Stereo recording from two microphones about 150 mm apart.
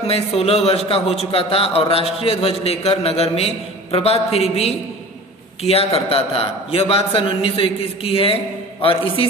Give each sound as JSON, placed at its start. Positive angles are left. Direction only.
{"t": 0.0, "sound": "a man's voice", "side_deg": 40}